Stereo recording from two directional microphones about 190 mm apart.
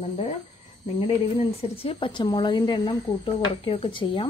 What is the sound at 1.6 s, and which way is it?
Speech, 30° left (ahead or behind).